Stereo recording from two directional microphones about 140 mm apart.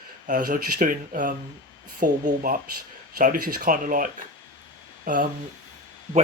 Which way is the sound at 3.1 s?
80° right.